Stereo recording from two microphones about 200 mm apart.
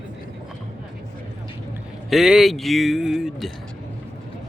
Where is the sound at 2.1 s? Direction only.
Centre (ahead or behind).